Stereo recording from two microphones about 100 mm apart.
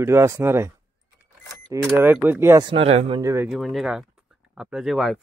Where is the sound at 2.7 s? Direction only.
80° right.